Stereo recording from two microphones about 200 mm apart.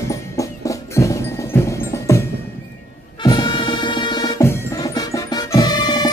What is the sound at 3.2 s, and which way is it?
Music, 20° left (ahead or behind).